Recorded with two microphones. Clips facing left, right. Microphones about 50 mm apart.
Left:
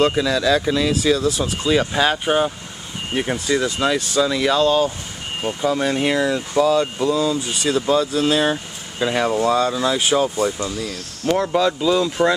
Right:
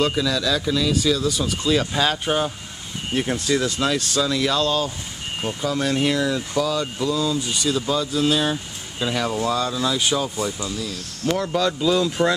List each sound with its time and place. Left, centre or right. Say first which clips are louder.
0.0 s speech: left 4 dB; left
1.7 s speech: left 3 dB; centre
11.6 s speech: left 2 dB; centre